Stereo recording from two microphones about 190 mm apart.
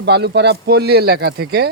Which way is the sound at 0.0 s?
60° right (ahead or behind).